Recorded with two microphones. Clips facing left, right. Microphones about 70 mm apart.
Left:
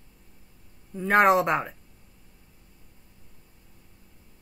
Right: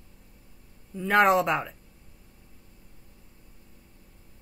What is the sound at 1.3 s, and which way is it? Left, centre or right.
Speech, left.